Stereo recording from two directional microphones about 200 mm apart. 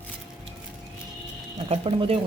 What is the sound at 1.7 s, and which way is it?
Speech, 25° right (ahead or behind).